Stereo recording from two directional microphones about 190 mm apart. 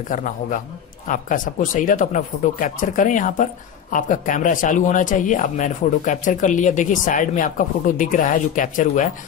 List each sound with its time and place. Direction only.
0.1 s speech: 45° left (ahead or behind)